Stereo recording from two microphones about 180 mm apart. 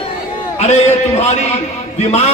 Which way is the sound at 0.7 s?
40° left (ahead or behind).